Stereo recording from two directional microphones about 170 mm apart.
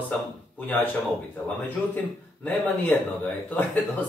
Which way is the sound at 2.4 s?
10° left (ahead or behind).